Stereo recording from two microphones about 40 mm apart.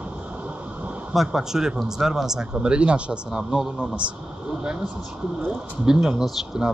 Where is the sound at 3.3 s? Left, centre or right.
Centre.